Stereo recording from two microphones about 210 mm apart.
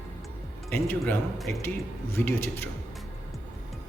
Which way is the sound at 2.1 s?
10° left (ahead or behind).